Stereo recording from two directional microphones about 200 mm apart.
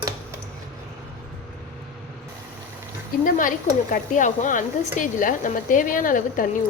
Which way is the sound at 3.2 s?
40° left (ahead or behind).